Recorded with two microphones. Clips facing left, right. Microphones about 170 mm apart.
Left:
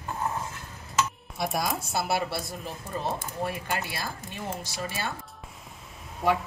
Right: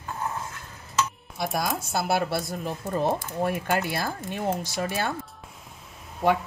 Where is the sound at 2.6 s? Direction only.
45° right (ahead or behind).